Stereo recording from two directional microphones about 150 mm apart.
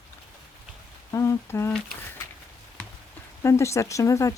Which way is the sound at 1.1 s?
20° left (ahead or behind).